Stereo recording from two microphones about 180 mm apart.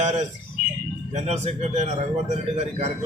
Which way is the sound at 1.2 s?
40° right (ahead or behind).